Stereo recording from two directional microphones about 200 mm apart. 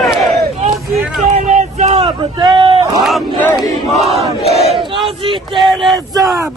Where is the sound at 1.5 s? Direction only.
35° right (ahead or behind).